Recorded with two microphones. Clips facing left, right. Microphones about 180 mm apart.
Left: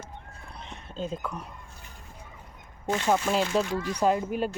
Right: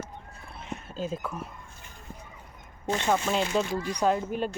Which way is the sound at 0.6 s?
5° right (ahead or behind).